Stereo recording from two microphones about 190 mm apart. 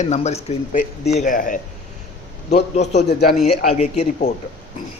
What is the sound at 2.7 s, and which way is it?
A woman's voice, 35° left (ahead or behind).